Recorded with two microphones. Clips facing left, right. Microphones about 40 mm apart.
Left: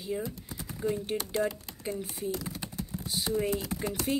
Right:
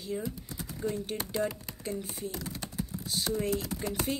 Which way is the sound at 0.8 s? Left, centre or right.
Centre.